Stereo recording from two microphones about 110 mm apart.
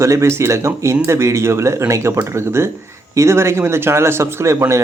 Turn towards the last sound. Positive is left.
turn(degrees=-25)  # may be behind; listen again after turning